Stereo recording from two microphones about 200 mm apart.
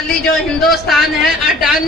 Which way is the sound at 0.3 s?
Centre (ahead or behind).